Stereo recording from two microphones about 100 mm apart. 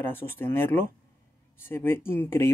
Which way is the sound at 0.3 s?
20° left (ahead or behind).